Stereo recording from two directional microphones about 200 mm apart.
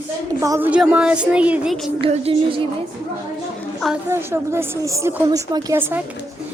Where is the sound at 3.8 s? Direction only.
Centre (ahead or behind).